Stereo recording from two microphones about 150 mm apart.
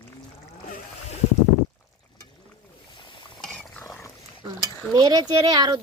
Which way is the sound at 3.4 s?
5° left (ahead or behind).